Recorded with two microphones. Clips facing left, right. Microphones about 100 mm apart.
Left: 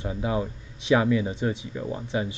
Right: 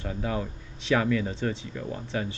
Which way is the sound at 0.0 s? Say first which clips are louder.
Left 3 dB; 15° left (ahead or behind).